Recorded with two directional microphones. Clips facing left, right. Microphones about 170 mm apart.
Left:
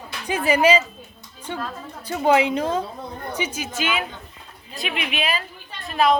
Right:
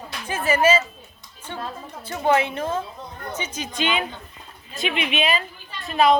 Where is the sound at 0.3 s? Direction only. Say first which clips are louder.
Left 2 dB; 15° left (ahead or behind).